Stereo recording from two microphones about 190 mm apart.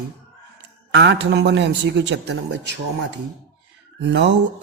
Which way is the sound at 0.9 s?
65° right (ahead or behind).